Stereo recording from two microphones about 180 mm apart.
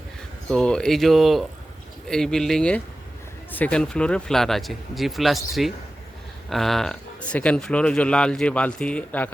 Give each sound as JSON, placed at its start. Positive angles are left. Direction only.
{"t": 0.5, "sound": "speech", "side_deg": 5}